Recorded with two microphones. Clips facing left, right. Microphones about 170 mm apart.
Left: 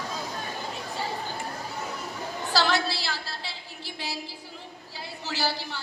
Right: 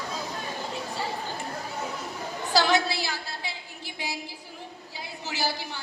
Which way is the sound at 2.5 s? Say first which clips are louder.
Right 2 dB; 20° right (ahead or behind).